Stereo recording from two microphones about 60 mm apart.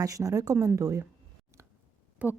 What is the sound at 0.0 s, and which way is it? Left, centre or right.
Speech, right.